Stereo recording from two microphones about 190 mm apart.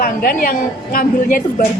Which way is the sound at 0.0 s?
50° left (ahead or behind).